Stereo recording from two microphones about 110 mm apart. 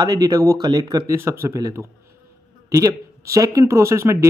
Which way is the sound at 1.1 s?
25° right (ahead or behind).